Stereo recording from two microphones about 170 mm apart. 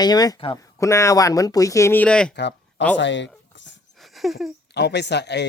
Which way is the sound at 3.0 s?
90° left.